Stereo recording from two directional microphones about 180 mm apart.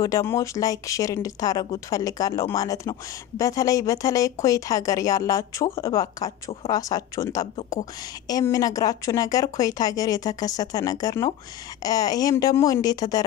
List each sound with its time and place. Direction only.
0.0 s speech: 15° left (ahead or behind)